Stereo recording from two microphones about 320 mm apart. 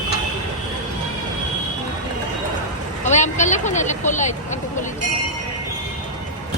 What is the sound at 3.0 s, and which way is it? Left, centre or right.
Speech, left.